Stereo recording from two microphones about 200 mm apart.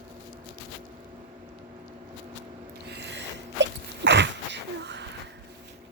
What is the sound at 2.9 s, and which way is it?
Sneeze, 60° right (ahead or behind).